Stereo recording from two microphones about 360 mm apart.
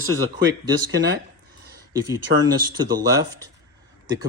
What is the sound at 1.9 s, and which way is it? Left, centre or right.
Speech, centre.